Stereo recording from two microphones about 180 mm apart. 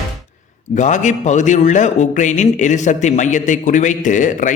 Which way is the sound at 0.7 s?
40° left (ahead or behind).